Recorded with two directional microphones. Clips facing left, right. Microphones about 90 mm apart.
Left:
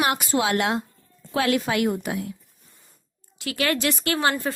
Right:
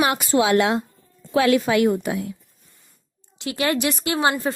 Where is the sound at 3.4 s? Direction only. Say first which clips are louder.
Right 2 dB; 25° right (ahead or behind).